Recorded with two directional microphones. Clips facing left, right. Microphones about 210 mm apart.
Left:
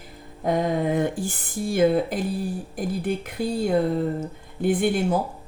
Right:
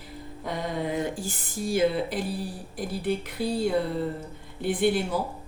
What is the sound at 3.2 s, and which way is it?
Speech, 50° left (ahead or behind).